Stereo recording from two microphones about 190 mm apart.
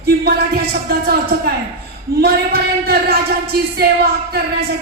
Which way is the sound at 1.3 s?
55° right (ahead or behind).